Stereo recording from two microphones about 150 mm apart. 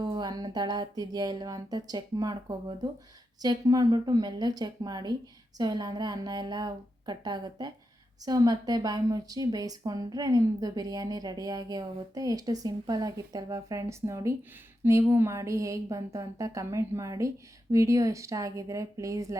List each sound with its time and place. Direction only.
0.0 s a woman's voice: 30° right (ahead or behind)